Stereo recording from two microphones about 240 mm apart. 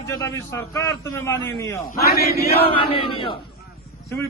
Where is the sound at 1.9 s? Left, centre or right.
Left.